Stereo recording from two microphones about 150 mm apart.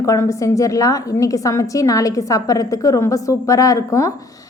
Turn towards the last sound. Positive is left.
turn(degrees=20)  # may be behind; listen again after turning